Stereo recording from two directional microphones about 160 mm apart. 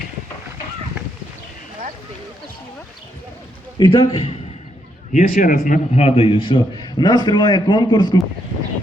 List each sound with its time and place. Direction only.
3.8 s speech: 25° left (ahead or behind)
5.1 s a man's voice: 60° left (ahead or behind); by 8.2 s 25° left (ahead or behind)